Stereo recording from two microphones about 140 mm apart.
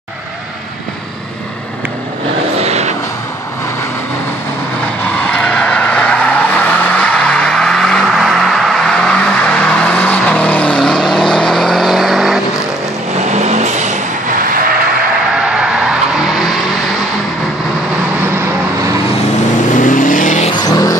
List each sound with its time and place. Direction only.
2.5 s vehicle: 50° right (ahead or behind)
5.3 s vehicle: 5° left (ahead or behind)
13.2 s vehicle: 55° right (ahead or behind)
15.9 s vehicle: 5° right (ahead or behind)
19.7 s vehicle: 70° left (ahead or behind)
20.5 s vehicle: 25° left (ahead or behind)